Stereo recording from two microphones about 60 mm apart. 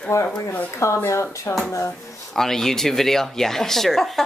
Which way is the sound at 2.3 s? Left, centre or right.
Centre.